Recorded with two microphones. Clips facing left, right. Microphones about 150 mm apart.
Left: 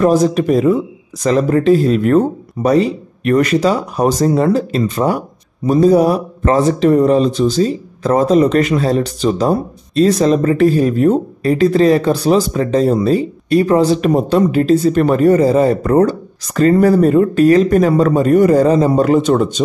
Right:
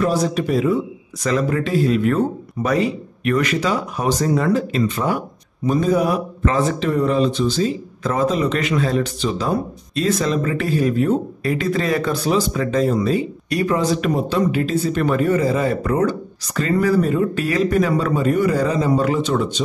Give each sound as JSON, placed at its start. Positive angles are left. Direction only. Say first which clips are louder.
{"t": 0.0, "sound": "a man's voice", "louder": "left 7 dB", "side_deg": 45}
{"t": 1.2, "sound": "speech", "louder": "left 8 dB", "side_deg": 35}
{"t": 17.3, "sound": "a man's voice", "louder": "left 9 dB", "side_deg": 40}